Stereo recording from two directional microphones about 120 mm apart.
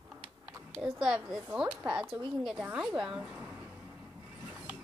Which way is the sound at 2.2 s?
10° right (ahead or behind).